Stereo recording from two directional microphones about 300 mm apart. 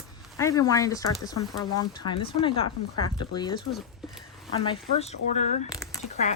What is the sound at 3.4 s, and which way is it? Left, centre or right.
Speech, centre.